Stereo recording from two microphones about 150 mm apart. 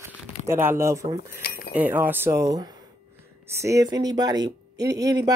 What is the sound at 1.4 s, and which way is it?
Cutlery, 80° left.